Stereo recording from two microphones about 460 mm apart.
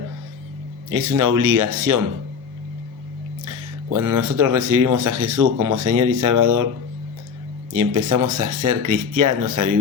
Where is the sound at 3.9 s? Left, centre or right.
Right.